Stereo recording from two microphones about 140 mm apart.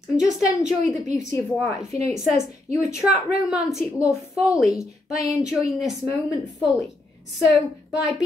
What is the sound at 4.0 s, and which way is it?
Speech, 25° left (ahead or behind).